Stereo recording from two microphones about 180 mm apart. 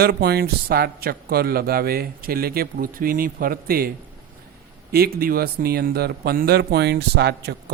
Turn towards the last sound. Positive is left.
turn(degrees=-65)  # may be behind; listen again after turning